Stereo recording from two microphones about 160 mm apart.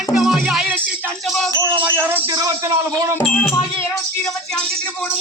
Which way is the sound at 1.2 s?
Centre (ahead or behind).